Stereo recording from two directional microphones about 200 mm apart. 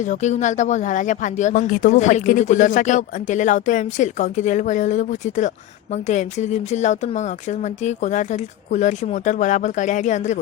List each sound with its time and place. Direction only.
0.0 s speech: 35° left (ahead or behind)